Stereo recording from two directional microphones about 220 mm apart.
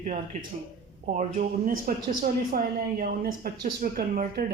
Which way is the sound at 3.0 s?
40° right (ahead or behind).